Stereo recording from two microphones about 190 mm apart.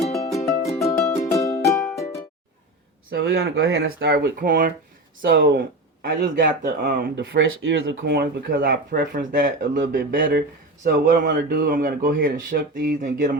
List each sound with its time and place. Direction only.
0.3 s music: centre (ahead or behind)
0.9 s music: 15° left (ahead or behind)
3.1 s speech: 60° right (ahead or behind)